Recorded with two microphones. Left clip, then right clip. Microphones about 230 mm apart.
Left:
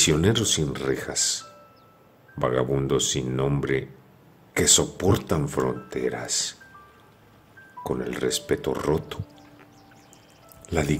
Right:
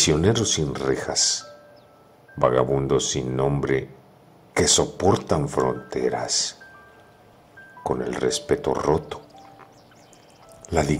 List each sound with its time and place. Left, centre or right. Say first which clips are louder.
0.0 s speech: right 2 dB; centre
2.3 s speech: right 4 dB; centre
7.8 s speech: right 3 dB; left
8.1 s speech: right 2 dB; centre
10.6 s music: right 4 dB; left